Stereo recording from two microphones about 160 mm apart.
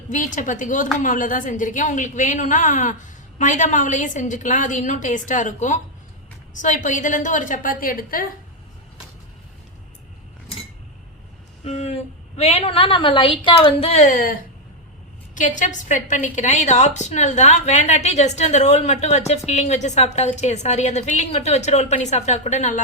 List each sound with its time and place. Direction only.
0.1 s a woman's voice: 55° left (ahead or behind)
11.6 s a woman's voice: 40° left (ahead or behind); by 14.3 s 55° left (ahead or behind)
15.4 s a woman's voice: 50° left (ahead or behind)